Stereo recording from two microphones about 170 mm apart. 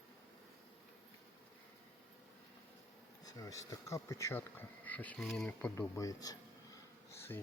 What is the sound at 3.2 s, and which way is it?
Speech, 20° left (ahead or behind).